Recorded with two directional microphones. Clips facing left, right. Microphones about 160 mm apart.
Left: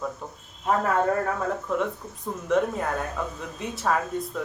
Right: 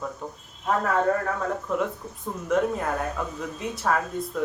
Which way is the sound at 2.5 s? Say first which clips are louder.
Even; centre (ahead or behind).